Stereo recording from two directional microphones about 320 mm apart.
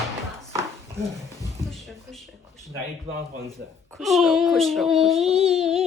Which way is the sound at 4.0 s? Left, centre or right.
Centre.